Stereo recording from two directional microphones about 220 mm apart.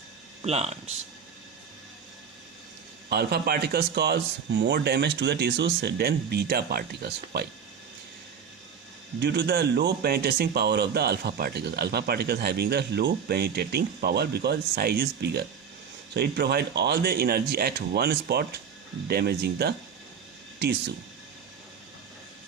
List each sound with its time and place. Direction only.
0.4 s speech: 30° right (ahead or behind)
3.1 s speech: 45° right (ahead or behind)
9.2 s speech: 50° right (ahead or behind)